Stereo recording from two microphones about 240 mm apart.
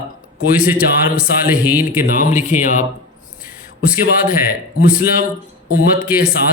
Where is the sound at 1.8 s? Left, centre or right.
Left.